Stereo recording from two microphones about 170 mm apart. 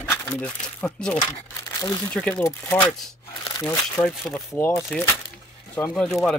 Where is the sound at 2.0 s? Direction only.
5° left (ahead or behind).